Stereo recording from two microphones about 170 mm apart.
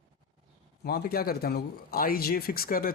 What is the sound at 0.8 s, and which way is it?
Speech, 65° left (ahead or behind).